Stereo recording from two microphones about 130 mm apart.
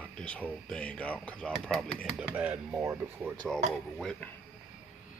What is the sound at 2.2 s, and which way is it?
Speech, 10° right (ahead or behind).